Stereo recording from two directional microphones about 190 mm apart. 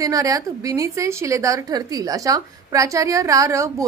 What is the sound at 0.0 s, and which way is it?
A woman's voice, 20° right (ahead or behind).